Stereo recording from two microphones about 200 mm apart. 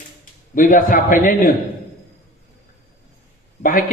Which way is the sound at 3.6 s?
45° left (ahead or behind).